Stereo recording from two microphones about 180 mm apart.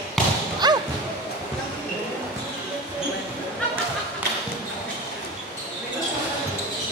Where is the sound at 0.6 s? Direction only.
25° right (ahead or behind).